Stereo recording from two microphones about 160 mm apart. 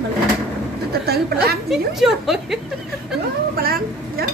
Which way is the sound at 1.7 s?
Centre (ahead or behind).